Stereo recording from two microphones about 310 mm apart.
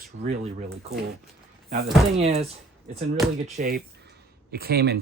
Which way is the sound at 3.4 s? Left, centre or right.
Right.